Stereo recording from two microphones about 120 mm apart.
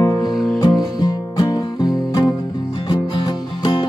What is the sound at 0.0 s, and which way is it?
Music, 30° left (ahead or behind).